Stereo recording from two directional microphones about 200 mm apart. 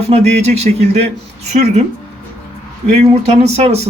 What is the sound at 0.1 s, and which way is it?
Speech, 35° right (ahead or behind).